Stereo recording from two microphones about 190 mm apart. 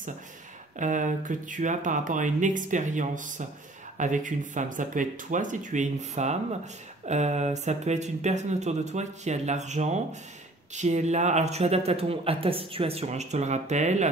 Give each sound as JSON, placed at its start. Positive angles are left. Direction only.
{"t": 0.7, "sound": "speech", "side_deg": -40}